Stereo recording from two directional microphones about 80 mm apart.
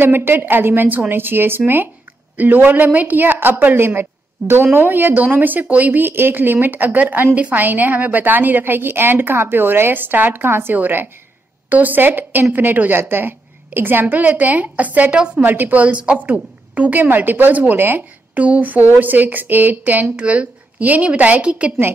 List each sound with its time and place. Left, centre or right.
0.0 s speech: right
15.4 s speech: right